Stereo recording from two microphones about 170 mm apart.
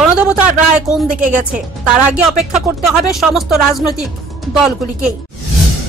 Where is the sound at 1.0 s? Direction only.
50° right (ahead or behind).